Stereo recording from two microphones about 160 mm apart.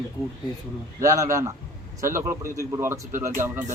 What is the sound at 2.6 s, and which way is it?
A man's voice, 15° right (ahead or behind).